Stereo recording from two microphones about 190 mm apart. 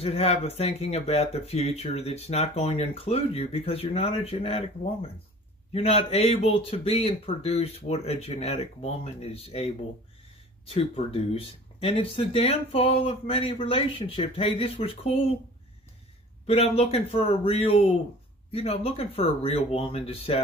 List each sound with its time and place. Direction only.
0.0 s speech: 30° left (ahead or behind)
16.4 s speech: 30° left (ahead or behind)